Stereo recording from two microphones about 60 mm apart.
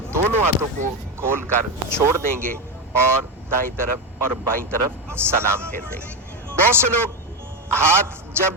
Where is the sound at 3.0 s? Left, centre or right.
Right.